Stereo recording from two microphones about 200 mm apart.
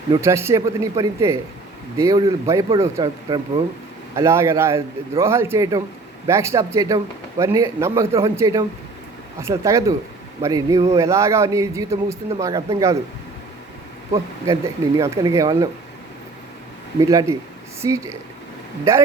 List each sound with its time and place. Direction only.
0.1 s a man's voice: 15° right (ahead or behind)
14.1 s a man's voice: 20° right (ahead or behind)
17.0 s a man's voice: 15° right (ahead or behind)